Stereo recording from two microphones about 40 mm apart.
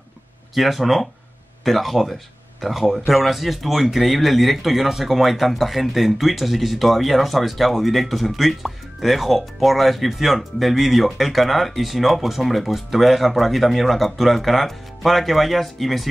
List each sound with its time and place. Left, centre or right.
0.6 s speech: centre